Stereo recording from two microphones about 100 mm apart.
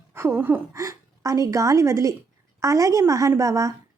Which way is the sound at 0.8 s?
35° right (ahead or behind).